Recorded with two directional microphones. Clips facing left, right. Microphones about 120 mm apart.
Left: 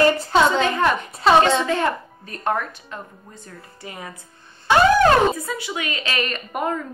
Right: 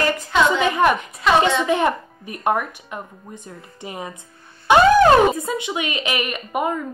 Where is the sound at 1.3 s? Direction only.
35° left (ahead or behind).